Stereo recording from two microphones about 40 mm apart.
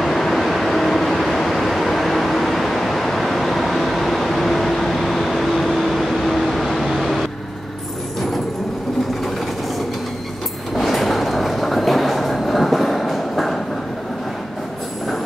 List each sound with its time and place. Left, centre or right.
0.0 s vehicle: centre
10.8 s train: centre